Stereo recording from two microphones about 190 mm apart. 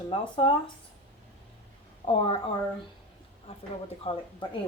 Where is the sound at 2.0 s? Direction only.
30° left (ahead or behind).